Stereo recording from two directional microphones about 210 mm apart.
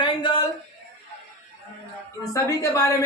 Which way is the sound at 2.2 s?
15° left (ahead or behind).